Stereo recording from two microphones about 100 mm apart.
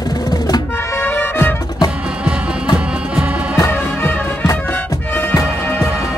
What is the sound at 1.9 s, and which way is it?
Music, 10° right (ahead or behind).